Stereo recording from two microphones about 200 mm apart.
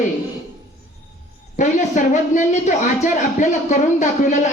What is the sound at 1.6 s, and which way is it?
Speech, 35° left (ahead or behind).